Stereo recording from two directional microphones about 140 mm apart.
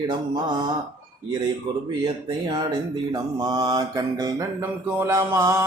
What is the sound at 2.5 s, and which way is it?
Mantra, 30° right (ahead or behind).